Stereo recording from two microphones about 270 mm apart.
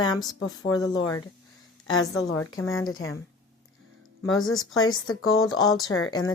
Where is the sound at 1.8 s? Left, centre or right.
Left.